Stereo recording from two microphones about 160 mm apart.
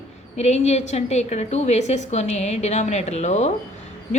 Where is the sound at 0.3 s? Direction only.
45° left (ahead or behind).